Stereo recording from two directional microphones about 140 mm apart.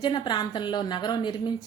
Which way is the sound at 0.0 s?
30° left (ahead or behind).